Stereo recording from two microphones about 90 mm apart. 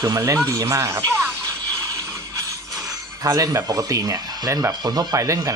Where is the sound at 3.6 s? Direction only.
45° right (ahead or behind).